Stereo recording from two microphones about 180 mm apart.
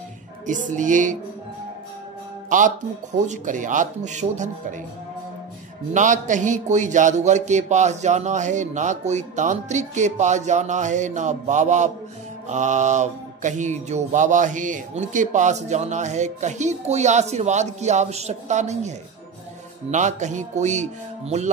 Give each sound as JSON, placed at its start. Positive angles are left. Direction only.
{"t": 0.5, "sound": "speech", "side_deg": -45}
{"t": 2.5, "sound": "speech", "side_deg": -45}
{"t": 5.9, "sound": "mantra", "side_deg": -45}